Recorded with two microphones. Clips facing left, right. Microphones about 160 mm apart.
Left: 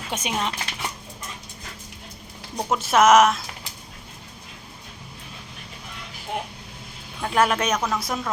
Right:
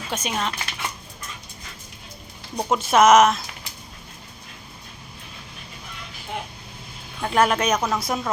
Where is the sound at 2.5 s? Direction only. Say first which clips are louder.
Right 2 dB; 5° right (ahead or behind).